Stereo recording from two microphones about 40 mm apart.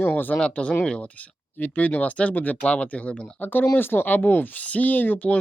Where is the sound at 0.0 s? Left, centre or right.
Left.